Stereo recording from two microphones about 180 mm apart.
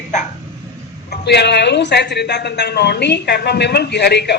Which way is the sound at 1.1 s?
70° left (ahead or behind).